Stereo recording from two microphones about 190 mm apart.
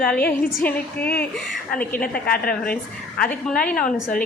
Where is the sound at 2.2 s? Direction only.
50° left (ahead or behind).